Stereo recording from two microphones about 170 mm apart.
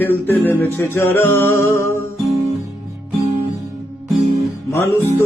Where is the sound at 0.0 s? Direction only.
10° left (ahead or behind).